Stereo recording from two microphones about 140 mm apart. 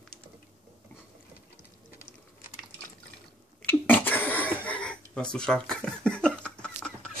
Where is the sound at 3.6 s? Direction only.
10° left (ahead or behind).